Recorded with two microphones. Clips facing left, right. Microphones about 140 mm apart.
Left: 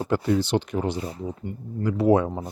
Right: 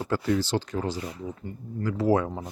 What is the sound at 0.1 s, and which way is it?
Speech, 20° left (ahead or behind).